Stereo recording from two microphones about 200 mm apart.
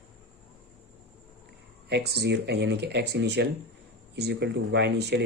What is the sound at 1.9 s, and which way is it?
Speech, 55° right (ahead or behind).